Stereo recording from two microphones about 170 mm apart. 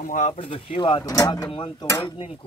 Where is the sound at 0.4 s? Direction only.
30° left (ahead or behind).